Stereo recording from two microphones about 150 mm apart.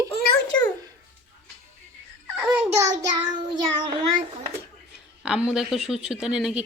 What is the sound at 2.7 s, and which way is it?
Child singing, 20° right (ahead or behind).